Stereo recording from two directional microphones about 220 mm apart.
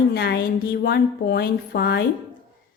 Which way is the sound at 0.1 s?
45° left (ahead or behind).